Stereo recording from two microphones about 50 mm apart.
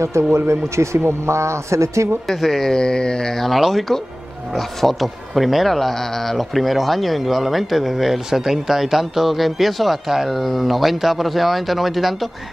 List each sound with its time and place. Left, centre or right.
0.3 s speech: right
2.2 s speech: centre
2.7 s speech: centre